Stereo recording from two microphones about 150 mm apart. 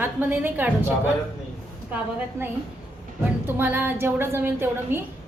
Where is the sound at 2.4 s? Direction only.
15° right (ahead or behind).